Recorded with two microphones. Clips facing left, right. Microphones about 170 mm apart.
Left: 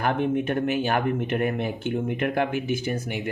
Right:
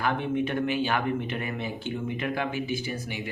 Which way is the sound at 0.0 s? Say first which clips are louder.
Left 3 dB; 50° left (ahead or behind).